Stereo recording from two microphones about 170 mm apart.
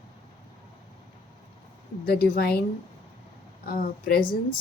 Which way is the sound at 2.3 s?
65° left (ahead or behind).